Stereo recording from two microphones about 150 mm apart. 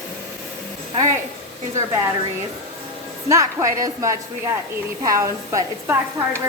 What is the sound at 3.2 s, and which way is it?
A woman's voice, 20° right (ahead or behind).